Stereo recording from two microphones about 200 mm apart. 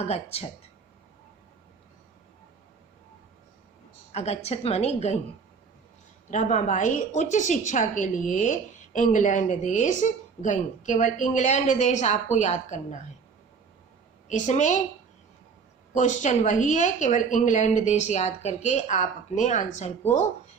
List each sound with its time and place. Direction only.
0.0 s a woman's voice: 30° left (ahead or behind)
4.1 s a woman's voice: 30° left (ahead or behind)
6.3 s a woman's voice: 40° left (ahead or behind)
14.3 s a woman's voice: 35° left (ahead or behind)
16.0 s a woman's voice: 35° left (ahead or behind)